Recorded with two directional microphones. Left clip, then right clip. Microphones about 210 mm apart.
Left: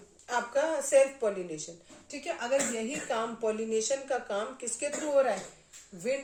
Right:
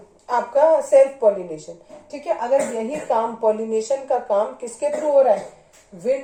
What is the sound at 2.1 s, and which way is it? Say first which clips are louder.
A woman's voice: right 11 dB; 35° left (ahead or behind).